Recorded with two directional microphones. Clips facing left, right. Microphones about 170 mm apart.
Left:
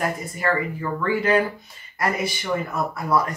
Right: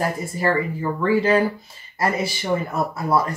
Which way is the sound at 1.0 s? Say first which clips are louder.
Right 3 dB; 30° right (ahead or behind).